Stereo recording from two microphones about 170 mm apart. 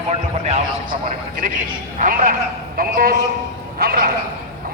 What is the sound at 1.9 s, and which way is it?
A man's voice, 50° right (ahead or behind).